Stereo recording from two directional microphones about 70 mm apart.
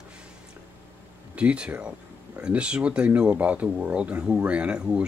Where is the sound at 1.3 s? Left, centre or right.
Centre.